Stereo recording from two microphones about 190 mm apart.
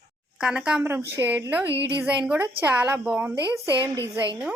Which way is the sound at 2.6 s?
10° right (ahead or behind).